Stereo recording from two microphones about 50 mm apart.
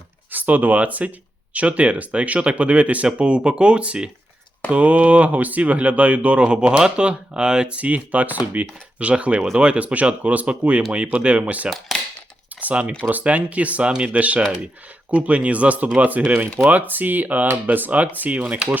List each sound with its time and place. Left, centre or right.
0.3 s speech: right; by 7.8 s centre
7.8 s speech: right